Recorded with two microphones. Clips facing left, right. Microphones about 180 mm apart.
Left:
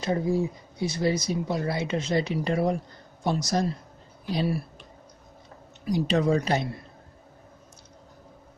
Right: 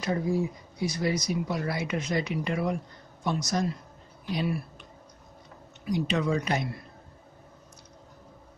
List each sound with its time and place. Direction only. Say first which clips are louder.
0.0 s a woman's voice: left 2 dB; 25° left (ahead or behind)
5.9 s a woman's voice: left 4 dB; 35° left (ahead or behind)